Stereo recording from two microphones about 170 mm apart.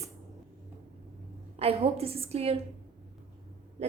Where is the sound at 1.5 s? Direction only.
35° right (ahead or behind).